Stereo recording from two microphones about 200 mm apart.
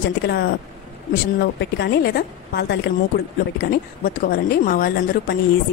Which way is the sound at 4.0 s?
45° left (ahead or behind).